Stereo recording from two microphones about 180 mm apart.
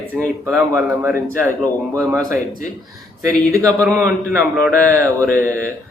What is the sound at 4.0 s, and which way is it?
Speech, 10° right (ahead or behind).